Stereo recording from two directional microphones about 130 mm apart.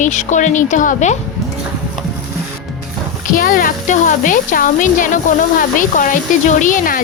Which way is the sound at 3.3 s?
90° left.